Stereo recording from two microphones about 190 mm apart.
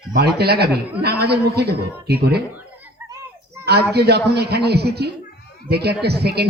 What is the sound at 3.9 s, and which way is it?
A man's voice, 60° right (ahead or behind).